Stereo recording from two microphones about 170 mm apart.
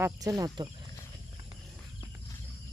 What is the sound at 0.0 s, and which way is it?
Speech, 20° right (ahead or behind).